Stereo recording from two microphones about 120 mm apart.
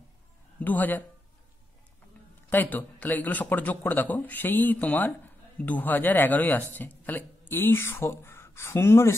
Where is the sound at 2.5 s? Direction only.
15° left (ahead or behind).